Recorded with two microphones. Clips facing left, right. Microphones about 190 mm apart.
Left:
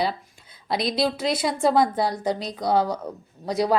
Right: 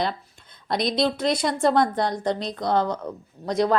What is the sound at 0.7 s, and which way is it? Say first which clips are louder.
A woman's voice: right 1 dB; 5° left (ahead or behind).